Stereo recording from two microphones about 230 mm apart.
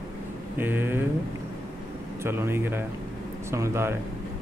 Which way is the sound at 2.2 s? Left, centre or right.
Centre.